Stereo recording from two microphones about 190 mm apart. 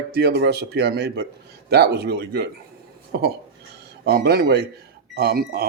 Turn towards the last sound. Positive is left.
turn(degrees=-55)  # may be behind; listen again after turning